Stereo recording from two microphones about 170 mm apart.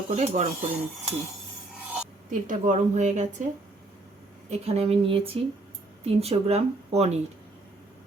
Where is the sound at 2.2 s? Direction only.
50° right (ahead or behind).